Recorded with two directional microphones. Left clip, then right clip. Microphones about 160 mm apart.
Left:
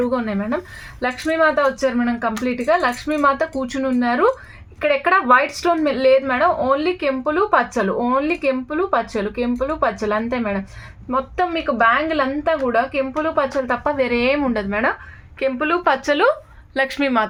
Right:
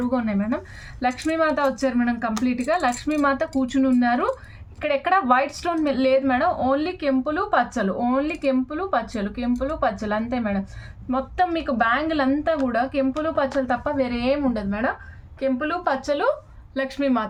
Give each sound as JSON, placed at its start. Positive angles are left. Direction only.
{"t": 0.1, "sound": "a woman's voice", "side_deg": 50}